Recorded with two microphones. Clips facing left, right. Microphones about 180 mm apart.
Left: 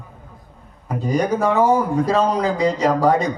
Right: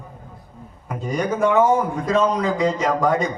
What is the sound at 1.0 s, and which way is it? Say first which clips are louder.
A man's voice: left 1 dB; 35° left (ahead or behind).